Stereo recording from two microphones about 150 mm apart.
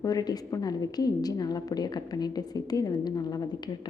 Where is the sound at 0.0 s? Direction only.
25° left (ahead or behind).